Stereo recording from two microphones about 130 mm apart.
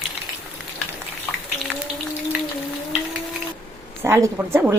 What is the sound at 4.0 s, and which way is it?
Speech, 20° right (ahead or behind).